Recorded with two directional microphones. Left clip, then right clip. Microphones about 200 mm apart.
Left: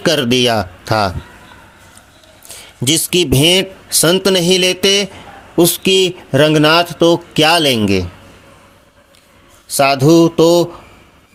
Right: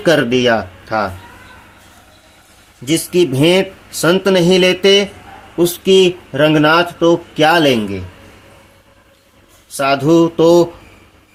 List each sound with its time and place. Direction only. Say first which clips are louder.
0.0 s speech: right 1 dB; 35° left (ahead or behind)
2.8 s speech: even; 45° left (ahead or behind)
9.7 s speech: left 2 dB; 30° left (ahead or behind)